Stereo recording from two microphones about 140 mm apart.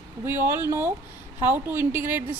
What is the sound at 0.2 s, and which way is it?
A woman's voice, 15° right (ahead or behind).